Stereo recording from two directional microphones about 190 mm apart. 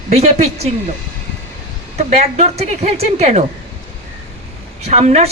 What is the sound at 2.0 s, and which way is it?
A man's voice, 35° right (ahead or behind).